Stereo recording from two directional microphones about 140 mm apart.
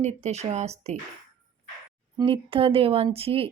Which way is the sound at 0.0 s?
50° right (ahead or behind).